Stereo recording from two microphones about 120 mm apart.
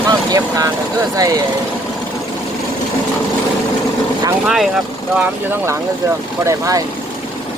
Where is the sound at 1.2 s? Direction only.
30° right (ahead or behind).